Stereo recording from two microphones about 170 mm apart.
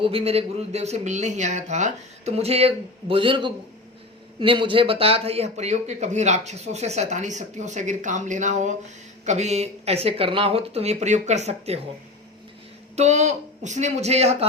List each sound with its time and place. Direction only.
0.0 s a man's voice: 35° right (ahead or behind)
13.0 s a man's voice: 45° right (ahead or behind)